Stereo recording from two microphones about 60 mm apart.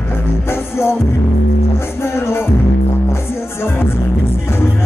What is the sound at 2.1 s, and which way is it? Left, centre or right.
Music, left.